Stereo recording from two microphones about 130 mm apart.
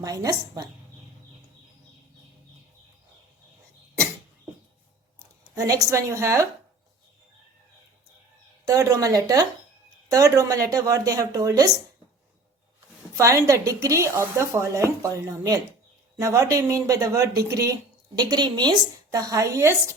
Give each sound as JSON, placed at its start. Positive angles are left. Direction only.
{"t": 0.0, "sound": "speech", "side_deg": -25}
{"t": 5.2, "sound": "speech", "side_deg": -25}
{"t": 8.6, "sound": "speech", "side_deg": -25}
{"t": 13.1, "sound": "speech", "side_deg": -25}